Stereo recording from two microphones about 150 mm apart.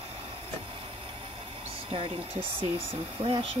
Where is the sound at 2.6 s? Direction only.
35° right (ahead or behind).